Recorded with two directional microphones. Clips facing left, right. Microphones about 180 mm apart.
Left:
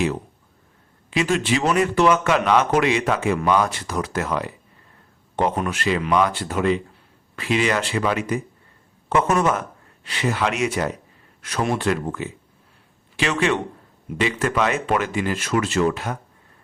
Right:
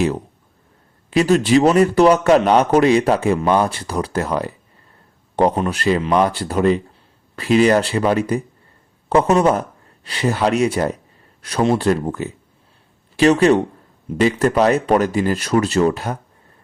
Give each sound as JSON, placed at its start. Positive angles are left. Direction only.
{"t": 1.1, "sound": "a man's voice", "side_deg": -40}